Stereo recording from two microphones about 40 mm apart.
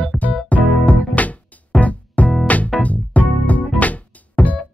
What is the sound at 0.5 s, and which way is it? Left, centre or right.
Music, left.